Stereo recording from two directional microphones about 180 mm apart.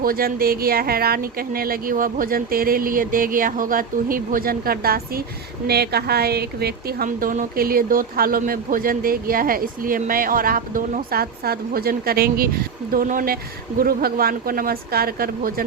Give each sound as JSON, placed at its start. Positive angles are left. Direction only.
{"t": 0.0, "sound": "speech", "side_deg": -55}